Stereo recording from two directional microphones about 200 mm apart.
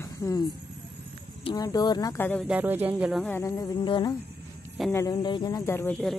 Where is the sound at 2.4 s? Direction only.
5° right (ahead or behind).